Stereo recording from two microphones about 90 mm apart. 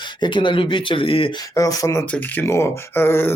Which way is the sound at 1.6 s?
40° left (ahead or behind).